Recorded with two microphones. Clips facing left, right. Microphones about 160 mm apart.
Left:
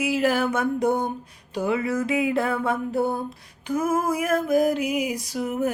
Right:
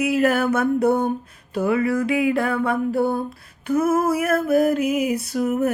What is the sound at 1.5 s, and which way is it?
Mantra, 20° left (ahead or behind).